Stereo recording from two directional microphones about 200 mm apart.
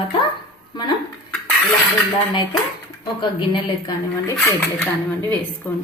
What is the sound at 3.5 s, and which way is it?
A woman's voice, 20° left (ahead or behind).